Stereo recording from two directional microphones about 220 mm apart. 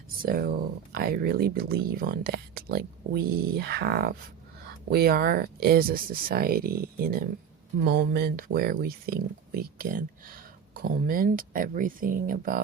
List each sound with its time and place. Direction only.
0.2 s speech: 40° right (ahead or behind)